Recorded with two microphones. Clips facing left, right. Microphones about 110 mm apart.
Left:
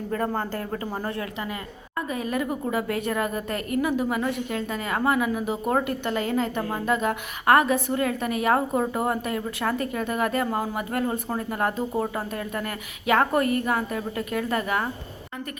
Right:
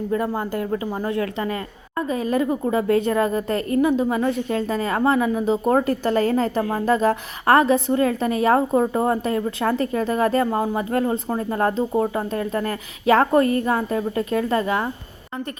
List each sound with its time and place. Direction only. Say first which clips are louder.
0.2 s speech: right 3 dB; 10° right (ahead or behind)
2.0 s a woman's voice: right 6 dB; 30° right (ahead or behind)